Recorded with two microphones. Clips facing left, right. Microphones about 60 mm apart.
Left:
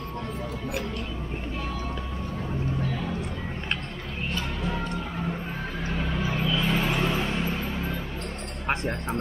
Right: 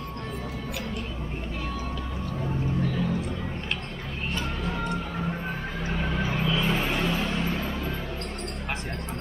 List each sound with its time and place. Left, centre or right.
6.3 s vehicle: centre
6.6 s vehicle: centre